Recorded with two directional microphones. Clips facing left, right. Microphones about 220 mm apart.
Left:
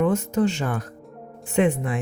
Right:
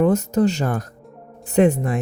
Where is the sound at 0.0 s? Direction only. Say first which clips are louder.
Right 4 dB; 40° right (ahead or behind).